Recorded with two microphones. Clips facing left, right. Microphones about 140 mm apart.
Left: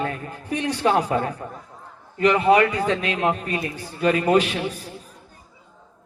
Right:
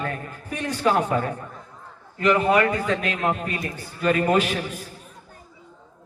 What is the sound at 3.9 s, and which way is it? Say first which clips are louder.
Speech: left 1 dB; 35° left (ahead or behind).